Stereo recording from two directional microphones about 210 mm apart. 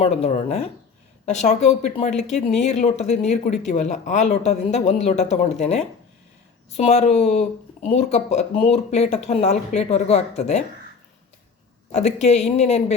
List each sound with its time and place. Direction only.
0.0 s speech: 30° left (ahead or behind)
11.9 s speech: 35° left (ahead or behind)